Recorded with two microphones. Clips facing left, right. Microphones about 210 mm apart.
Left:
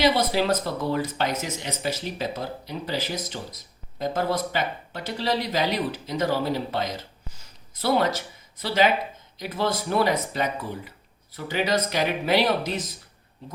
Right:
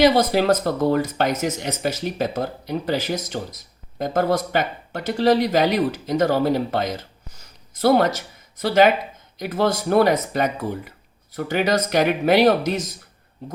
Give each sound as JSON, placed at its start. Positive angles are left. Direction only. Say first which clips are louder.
{"t": 0.0, "sound": "speech", "louder": "right 5 dB", "side_deg": -45}